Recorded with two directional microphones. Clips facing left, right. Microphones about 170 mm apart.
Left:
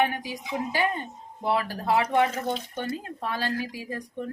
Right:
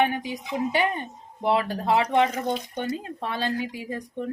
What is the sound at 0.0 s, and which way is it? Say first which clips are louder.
Speech: right 2 dB; 25° right (ahead or behind).